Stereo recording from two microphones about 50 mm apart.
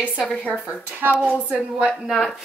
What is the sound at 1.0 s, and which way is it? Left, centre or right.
Speech, right.